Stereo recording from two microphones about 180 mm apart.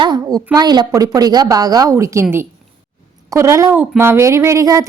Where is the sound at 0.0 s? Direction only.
20° right (ahead or behind).